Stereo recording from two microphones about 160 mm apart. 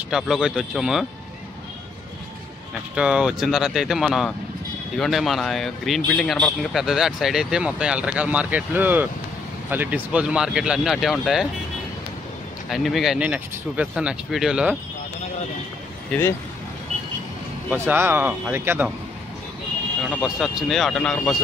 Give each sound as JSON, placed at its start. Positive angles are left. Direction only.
{"t": 0.1, "sound": "speech", "side_deg": -5}
{"t": 3.0, "sound": "speech", "side_deg": -5}
{"t": 12.6, "sound": "speech", "side_deg": 0}
{"t": 16.1, "sound": "speech", "side_deg": 15}
{"t": 17.6, "sound": "speech", "side_deg": -15}
{"t": 20.0, "sound": "speech", "side_deg": 0}